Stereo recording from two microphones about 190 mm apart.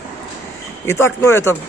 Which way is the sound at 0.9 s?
15° left (ahead or behind).